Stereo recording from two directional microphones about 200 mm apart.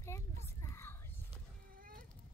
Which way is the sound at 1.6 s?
45° right (ahead or behind).